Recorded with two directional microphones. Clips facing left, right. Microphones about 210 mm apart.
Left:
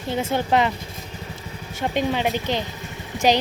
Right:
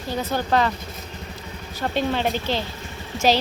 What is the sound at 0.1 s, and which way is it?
Speech, 25° left (ahead or behind).